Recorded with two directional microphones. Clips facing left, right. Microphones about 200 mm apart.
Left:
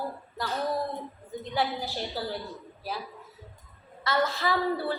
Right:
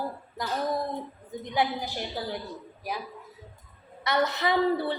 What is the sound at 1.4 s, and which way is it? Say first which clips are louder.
Speech: right 2 dB; 15° right (ahead or behind).